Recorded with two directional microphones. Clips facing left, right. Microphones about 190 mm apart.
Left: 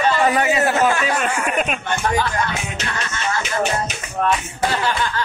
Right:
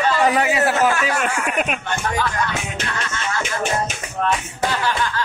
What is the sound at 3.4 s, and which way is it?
Music, 50° right (ahead or behind).